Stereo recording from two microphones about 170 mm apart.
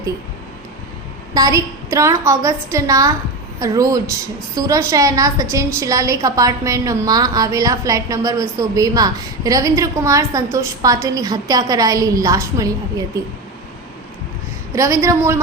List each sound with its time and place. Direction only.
1.3 s a woman's voice: 20° right (ahead or behind)
14.8 s a woman's voice: 15° right (ahead or behind)